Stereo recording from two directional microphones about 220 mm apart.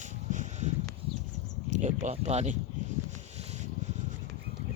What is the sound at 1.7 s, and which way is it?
Speech, 35° right (ahead or behind).